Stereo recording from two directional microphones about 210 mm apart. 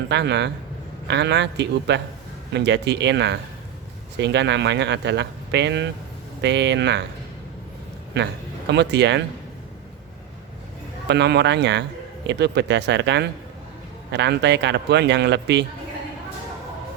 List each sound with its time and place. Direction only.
0.1 s speech: 55° right (ahead or behind)
8.1 s speech: 55° right (ahead or behind)
11.1 s a man's voice: 55° right (ahead or behind)